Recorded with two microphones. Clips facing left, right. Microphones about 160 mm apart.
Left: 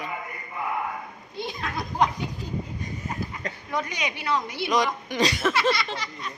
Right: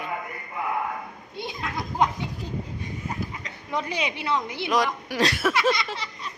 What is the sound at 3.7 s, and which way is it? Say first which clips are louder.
Speech: right 2 dB; 30° right (ahead or behind).